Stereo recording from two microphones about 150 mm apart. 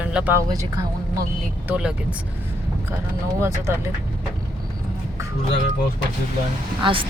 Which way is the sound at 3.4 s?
20° right (ahead or behind).